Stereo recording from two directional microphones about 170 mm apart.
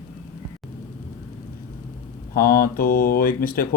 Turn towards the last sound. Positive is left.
turn(degrees=55)  # may be behind; listen again after turning